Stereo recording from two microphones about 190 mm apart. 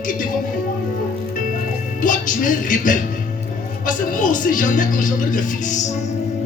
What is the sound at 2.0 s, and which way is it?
A man's voice, 45° left (ahead or behind).